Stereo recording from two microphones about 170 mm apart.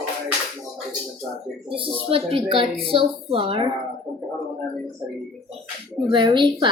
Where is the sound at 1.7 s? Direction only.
30° right (ahead or behind).